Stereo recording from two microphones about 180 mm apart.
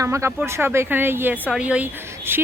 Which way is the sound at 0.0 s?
15° right (ahead or behind).